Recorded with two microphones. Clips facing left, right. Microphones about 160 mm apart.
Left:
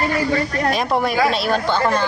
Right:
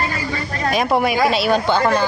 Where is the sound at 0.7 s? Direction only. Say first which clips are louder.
Right 5 dB; 5° right (ahead or behind).